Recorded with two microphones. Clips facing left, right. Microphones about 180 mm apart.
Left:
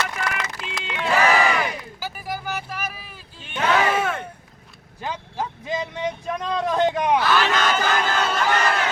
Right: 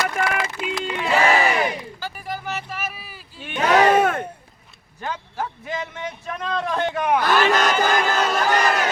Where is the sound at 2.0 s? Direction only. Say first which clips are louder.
Left 2 dB; 5° left (ahead or behind).